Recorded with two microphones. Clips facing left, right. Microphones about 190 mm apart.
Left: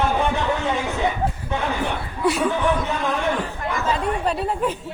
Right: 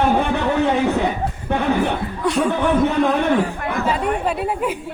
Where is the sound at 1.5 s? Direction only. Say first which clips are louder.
Right 10 dB; 60° right (ahead or behind).